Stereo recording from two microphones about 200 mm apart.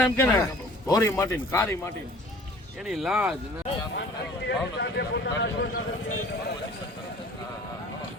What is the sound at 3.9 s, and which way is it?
Speech, 60° left (ahead or behind).